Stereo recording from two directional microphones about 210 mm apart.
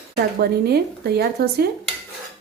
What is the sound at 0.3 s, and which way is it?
A woman's voice, 50° right (ahead or behind).